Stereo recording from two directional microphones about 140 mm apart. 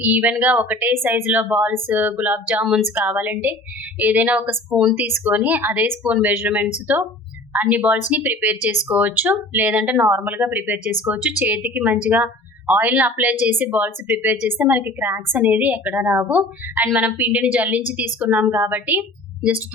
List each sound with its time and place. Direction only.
0.0 s a woman's voice: 10° right (ahead or behind)